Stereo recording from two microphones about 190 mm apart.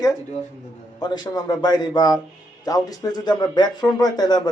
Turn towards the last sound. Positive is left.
turn(degrees=20)  # may be behind; listen again after turning